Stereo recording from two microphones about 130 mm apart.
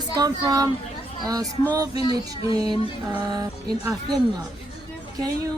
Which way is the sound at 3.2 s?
30° right (ahead or behind).